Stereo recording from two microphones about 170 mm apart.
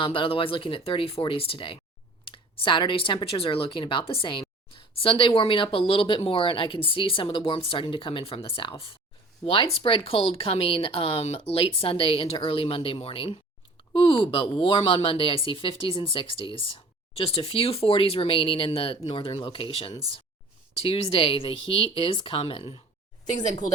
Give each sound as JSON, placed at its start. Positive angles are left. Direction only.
{"t": 0.0, "sound": "speech", "side_deg": 30}